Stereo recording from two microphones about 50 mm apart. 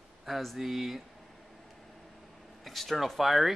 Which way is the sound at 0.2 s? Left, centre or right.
Centre.